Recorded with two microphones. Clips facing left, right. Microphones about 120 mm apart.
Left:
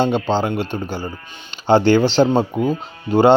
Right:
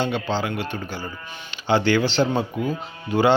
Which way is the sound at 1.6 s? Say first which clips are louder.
Left 6 dB; 40° left (ahead or behind).